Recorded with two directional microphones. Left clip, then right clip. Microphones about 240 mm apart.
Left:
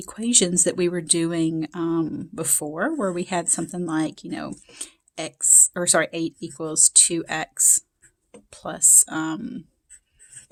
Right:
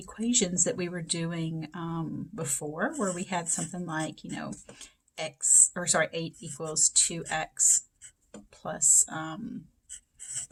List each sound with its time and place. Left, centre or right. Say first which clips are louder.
0.0 s speech: left 7 dB; left